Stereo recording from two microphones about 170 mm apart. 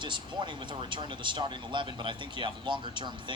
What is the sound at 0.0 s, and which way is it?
Speech, 25° right (ahead or behind).